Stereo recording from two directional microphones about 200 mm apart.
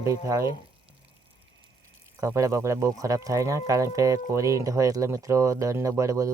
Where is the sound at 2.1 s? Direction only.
15° right (ahead or behind).